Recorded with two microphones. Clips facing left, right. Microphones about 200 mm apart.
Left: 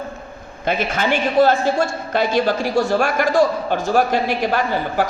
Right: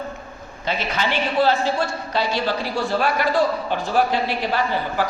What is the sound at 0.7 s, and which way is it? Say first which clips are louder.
A woman's voice: left 4 dB; 50° left (ahead or behind).